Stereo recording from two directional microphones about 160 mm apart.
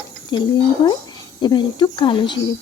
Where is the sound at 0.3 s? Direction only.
30° left (ahead or behind).